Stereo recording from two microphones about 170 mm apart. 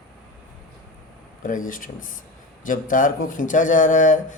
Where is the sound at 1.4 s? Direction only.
50° left (ahead or behind).